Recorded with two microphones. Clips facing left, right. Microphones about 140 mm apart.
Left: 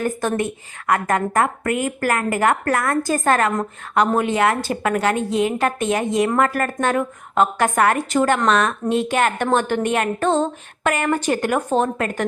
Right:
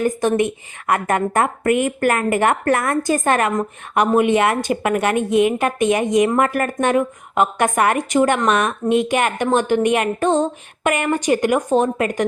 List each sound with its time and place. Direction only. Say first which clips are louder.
0.0 s a woman's voice: right 4 dB; 15° right (ahead or behind)